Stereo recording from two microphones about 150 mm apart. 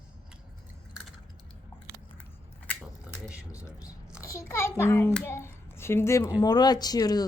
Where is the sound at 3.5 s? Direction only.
20° left (ahead or behind).